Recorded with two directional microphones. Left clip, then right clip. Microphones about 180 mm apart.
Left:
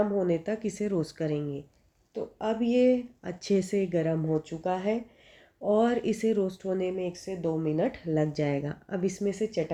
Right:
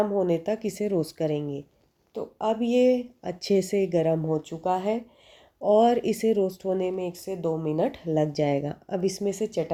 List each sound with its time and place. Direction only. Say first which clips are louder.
0.0 s speech: right 3 dB; 30° right (ahead or behind)
5.5 s speech: right 5 dB; 25° right (ahead or behind)
9.1 s speech: right 2 dB; 35° right (ahead or behind)